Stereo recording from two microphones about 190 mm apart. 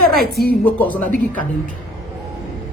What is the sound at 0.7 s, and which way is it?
Speech, 10° left (ahead or behind).